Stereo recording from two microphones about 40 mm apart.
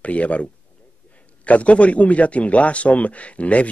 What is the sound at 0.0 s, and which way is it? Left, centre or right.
A man's voice, left.